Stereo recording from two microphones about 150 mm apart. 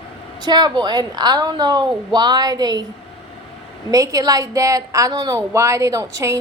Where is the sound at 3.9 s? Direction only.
25° right (ahead or behind).